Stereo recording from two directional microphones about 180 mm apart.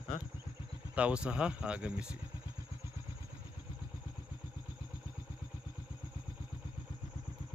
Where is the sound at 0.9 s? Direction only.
5° right (ahead or behind).